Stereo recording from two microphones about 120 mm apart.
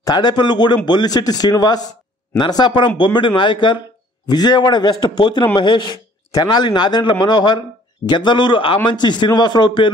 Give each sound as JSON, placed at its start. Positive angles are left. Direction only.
{"t": 0.0, "sound": "speech", "side_deg": 35}